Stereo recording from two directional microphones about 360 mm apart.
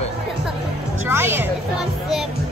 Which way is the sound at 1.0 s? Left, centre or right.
Centre.